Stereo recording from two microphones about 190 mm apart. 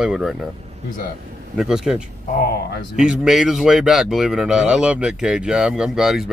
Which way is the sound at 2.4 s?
55° left (ahead or behind).